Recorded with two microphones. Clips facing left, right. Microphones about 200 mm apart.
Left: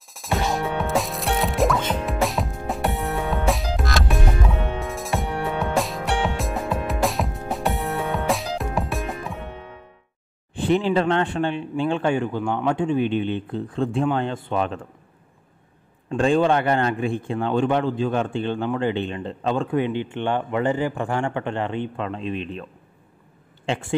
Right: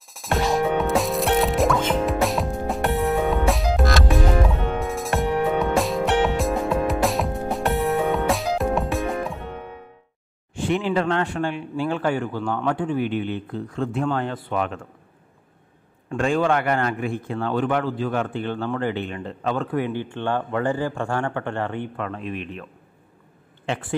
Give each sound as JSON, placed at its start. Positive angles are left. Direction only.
{"t": 0.1, "sound": "music", "side_deg": 0}
{"t": 10.6, "sound": "a man's voice", "side_deg": 30}
{"t": 16.1, "sound": "a man's voice", "side_deg": 25}